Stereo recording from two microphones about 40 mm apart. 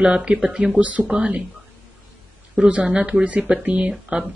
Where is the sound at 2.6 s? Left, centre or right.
Right.